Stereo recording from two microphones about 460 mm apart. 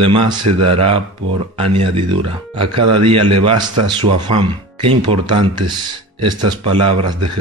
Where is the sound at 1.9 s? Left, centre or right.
Right.